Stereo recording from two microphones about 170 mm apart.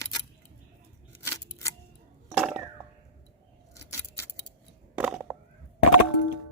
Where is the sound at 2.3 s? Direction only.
5° right (ahead or behind).